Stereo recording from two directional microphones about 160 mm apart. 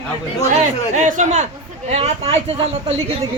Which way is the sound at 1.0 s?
50° right (ahead or behind).